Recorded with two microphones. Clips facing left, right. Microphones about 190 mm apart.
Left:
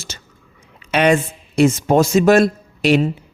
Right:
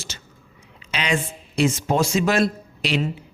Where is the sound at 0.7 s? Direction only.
55° left (ahead or behind).